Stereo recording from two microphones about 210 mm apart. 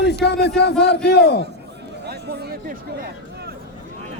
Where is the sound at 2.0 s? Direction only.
50° right (ahead or behind).